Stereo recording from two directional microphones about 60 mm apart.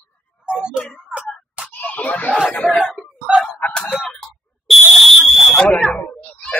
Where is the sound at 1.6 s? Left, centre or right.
Left.